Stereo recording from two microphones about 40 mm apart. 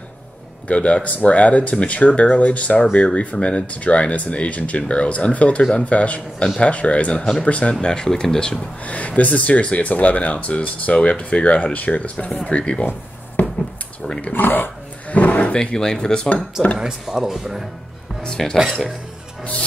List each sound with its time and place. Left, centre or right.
0.7 s speech: left
7.8 s speech: centre
8.8 s speech: left
14.3 s speech: left
15.0 s drawer open or close: left
15.6 s speech: centre
16.7 s speech: centre
18.2 s speech: centre
18.6 s speech: centre